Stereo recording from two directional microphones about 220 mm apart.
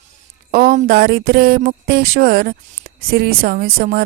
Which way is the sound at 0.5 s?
40° right (ahead or behind).